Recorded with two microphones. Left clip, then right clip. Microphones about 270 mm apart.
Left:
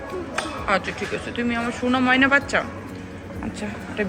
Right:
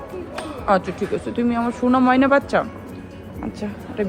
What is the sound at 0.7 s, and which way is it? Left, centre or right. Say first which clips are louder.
A man's voice: right 5 dB; centre.